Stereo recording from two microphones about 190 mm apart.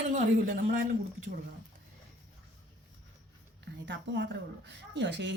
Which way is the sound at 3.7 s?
70° right (ahead or behind).